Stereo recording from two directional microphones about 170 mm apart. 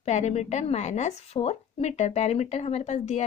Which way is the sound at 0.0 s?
40° left (ahead or behind).